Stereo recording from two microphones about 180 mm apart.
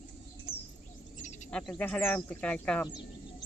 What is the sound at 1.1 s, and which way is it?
Insect, 40° left (ahead or behind).